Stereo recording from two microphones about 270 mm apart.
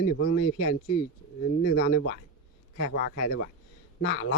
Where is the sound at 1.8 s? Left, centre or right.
Left.